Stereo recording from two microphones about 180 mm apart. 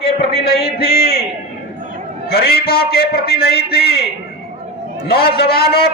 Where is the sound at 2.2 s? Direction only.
60° left (ahead or behind).